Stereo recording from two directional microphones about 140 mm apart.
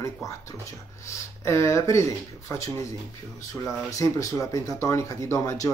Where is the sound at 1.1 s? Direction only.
20° left (ahead or behind).